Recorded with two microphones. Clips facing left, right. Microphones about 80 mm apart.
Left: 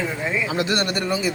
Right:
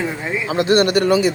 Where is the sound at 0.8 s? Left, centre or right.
Right.